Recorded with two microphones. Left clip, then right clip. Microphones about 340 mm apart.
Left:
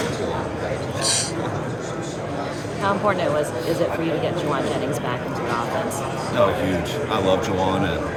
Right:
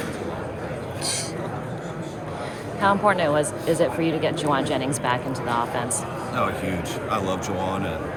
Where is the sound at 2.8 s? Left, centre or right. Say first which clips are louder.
Right 1 dB; centre.